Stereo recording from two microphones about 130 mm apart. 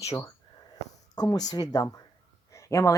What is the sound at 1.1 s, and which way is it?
Speech, 30° left (ahead or behind).